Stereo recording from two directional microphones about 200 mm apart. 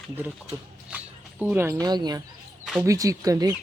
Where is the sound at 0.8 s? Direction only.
5° right (ahead or behind).